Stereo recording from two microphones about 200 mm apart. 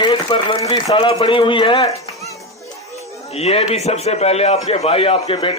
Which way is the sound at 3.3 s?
30° left (ahead or behind).